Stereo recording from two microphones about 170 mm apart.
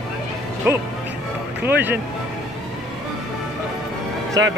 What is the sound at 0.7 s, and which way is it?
Speech, 15° right (ahead or behind).